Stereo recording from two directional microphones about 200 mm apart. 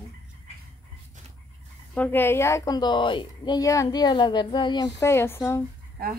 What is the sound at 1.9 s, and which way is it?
A woman's voice, 10° left (ahead or behind).